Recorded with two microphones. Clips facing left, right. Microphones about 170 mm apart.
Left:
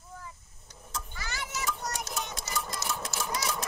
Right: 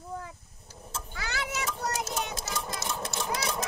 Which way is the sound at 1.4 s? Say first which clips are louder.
Right 3 dB; 70° right (ahead or behind).